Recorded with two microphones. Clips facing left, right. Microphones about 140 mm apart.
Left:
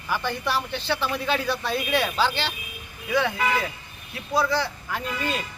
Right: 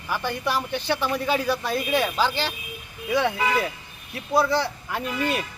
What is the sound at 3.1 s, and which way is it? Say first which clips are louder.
A man's voice: right 1 dB; 20° right (ahead or behind).